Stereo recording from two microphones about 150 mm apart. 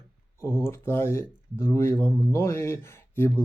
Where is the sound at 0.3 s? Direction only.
15° left (ahead or behind).